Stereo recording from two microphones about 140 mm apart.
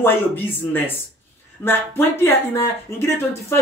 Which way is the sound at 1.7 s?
15° left (ahead or behind).